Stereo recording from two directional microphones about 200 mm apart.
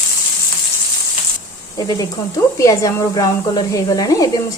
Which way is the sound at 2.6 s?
15° left (ahead or behind).